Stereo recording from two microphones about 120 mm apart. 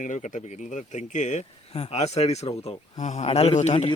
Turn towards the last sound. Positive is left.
turn(degrees=70)  # may be behind; listen again after turning